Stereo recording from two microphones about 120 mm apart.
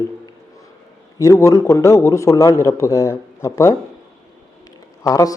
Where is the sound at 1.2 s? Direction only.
25° left (ahead or behind).